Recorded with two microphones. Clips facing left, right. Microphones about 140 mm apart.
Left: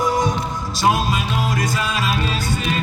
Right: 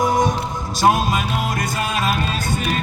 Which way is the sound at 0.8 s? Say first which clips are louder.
Right 2 dB; 50° right (ahead or behind).